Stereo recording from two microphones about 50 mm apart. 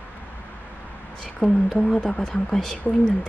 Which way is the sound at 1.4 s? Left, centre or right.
Centre.